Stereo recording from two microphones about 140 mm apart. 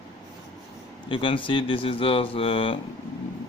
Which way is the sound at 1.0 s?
40° left (ahead or behind).